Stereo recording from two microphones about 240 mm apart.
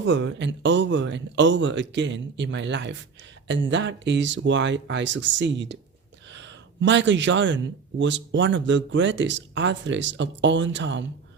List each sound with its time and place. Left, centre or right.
0.0 s speech: right